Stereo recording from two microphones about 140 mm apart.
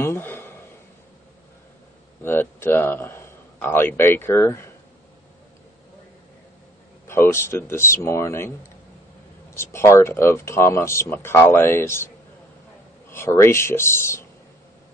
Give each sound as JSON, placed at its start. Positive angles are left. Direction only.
{"t": 0.0, "sound": "speech", "side_deg": 15}
{"t": 2.2, "sound": "a man's voice", "side_deg": 15}
{"t": 7.1, "sound": "speech", "side_deg": 20}
{"t": 13.1, "sound": "speech", "side_deg": 20}